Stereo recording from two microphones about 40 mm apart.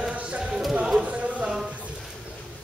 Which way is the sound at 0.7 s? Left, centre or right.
Centre.